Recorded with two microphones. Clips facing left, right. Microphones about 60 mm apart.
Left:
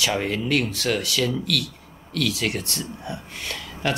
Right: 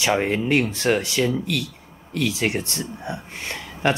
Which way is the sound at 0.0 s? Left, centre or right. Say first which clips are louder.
Right 3 dB; right.